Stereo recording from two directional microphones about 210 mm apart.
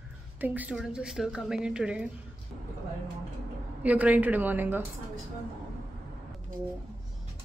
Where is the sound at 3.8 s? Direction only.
5° right (ahead or behind).